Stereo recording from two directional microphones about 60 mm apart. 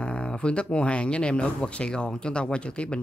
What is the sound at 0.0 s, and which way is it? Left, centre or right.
Speech, centre.